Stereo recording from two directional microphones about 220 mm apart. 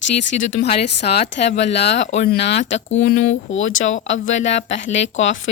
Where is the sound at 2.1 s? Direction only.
40° left (ahead or behind).